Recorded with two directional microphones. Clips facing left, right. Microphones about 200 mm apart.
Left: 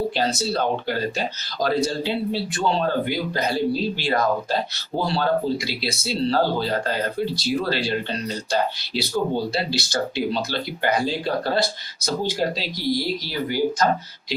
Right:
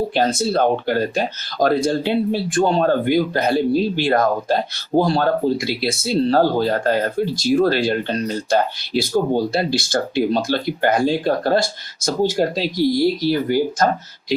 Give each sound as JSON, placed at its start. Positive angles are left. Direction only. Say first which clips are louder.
{"t": 0.2, "sound": "speech", "louder": "right 5 dB", "side_deg": -50}